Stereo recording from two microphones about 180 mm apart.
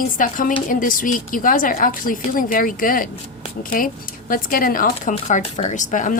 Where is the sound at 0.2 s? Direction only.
50° left (ahead or behind).